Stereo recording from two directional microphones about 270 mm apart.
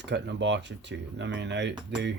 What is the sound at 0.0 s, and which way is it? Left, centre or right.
Speech, right.